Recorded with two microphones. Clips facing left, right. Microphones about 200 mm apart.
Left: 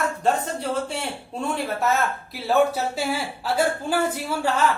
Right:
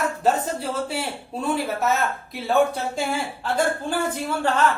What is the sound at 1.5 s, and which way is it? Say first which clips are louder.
A woman's voice: left 1 dB; centre (ahead or behind).